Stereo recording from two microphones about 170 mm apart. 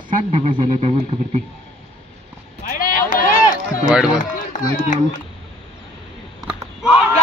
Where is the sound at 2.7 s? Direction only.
55° left (ahead or behind).